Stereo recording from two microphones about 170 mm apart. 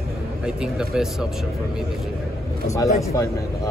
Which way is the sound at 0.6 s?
5° right (ahead or behind).